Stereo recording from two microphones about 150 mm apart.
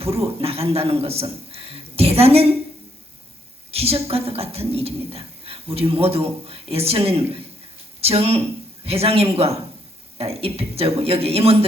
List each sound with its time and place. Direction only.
0.0 s a woman's voice: 40° right (ahead or behind)
3.7 s a woman's voice: 40° right (ahead or behind)